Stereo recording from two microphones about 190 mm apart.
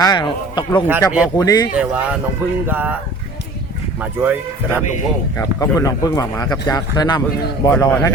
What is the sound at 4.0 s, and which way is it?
Speech, 10° right (ahead or behind).